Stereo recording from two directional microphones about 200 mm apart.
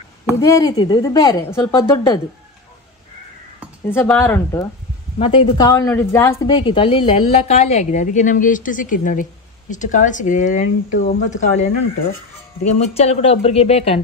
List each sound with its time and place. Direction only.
0.4 s a woman's voice: 15° left (ahead or behind)
3.8 s speech: 10° left (ahead or behind)
5.2 s a woman's voice: 25° left (ahead or behind)
12.7 s a woman's voice: 30° left (ahead or behind)